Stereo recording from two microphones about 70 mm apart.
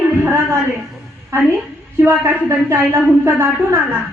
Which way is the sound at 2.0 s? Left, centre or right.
Right.